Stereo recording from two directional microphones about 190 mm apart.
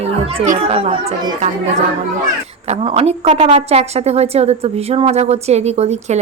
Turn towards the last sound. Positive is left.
turn(degrees=-35)  # may be behind; listen again after turning